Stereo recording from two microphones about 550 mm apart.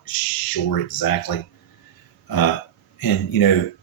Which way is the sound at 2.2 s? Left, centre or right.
Left.